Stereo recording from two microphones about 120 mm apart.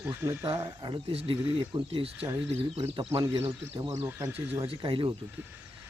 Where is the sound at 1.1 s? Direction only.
50° right (ahead or behind).